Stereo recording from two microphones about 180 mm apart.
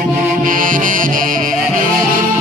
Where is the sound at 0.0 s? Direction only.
50° right (ahead or behind).